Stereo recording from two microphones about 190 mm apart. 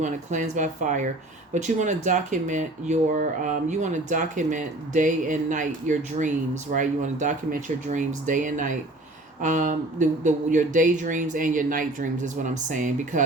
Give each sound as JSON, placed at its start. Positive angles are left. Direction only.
{"t": 0.0, "sound": "speech", "side_deg": -40}